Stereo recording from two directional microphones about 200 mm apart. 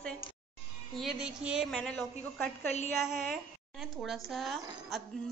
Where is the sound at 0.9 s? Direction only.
Centre (ahead or behind).